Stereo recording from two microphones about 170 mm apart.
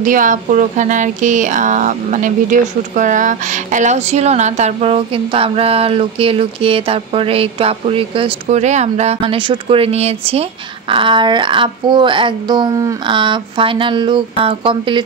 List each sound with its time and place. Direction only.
0.0 s speech: 50° right (ahead or behind); by 15.0 s 30° right (ahead or behind)